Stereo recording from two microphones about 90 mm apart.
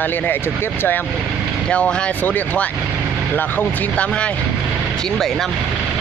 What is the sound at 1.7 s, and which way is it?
Speech, 10° left (ahead or behind).